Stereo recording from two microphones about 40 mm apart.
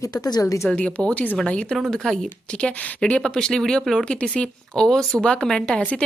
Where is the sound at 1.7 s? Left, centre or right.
Centre.